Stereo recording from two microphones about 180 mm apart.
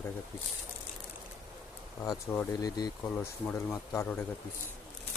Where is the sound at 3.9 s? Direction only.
15° left (ahead or behind).